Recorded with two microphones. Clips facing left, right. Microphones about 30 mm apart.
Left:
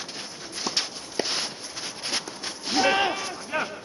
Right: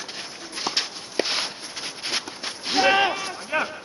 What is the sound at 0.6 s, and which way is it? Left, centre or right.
Walk, centre.